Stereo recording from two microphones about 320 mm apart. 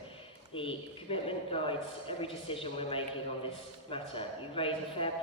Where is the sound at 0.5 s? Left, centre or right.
Centre.